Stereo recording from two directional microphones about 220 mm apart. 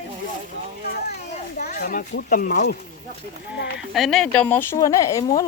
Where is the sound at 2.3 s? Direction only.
40° left (ahead or behind).